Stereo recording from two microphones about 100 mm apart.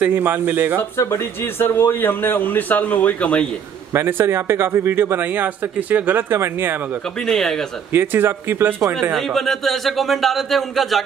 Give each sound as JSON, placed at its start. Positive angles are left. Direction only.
{"t": 0.0, "sound": "speech", "side_deg": -20}
{"t": 0.7, "sound": "speech", "side_deg": 25}
{"t": 3.9, "sound": "speech", "side_deg": -25}
{"t": 7.2, "sound": "speech", "side_deg": 5}
{"t": 7.9, "sound": "speech", "side_deg": -20}
{"t": 9.1, "sound": "speech", "side_deg": 5}